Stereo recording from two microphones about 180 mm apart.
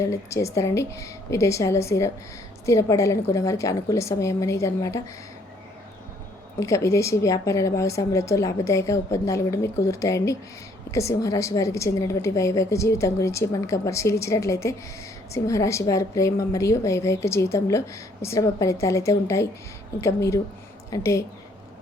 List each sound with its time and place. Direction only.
0.0 s a woman's voice: 15° left (ahead or behind)
6.6 s a woman's voice: 15° left (ahead or behind)